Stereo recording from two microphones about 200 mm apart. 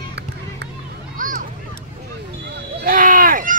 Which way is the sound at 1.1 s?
40° right (ahead or behind).